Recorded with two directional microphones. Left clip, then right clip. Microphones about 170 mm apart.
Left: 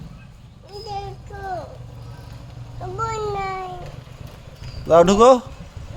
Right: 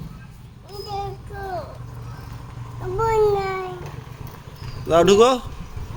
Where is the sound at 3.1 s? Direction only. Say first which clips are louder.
Right 8 dB; 30° left (ahead or behind).